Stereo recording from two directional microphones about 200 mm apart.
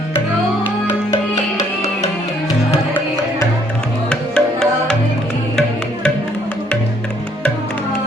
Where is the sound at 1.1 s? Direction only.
15° left (ahead or behind).